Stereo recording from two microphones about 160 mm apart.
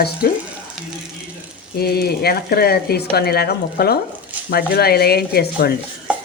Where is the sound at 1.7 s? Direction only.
80° left.